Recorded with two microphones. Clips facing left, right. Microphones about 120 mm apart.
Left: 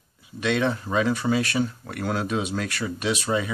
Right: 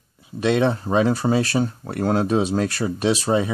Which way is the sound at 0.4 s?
35° right (ahead or behind).